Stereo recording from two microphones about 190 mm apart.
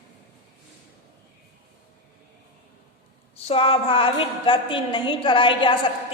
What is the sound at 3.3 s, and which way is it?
A woman's voice, 30° left (ahead or behind).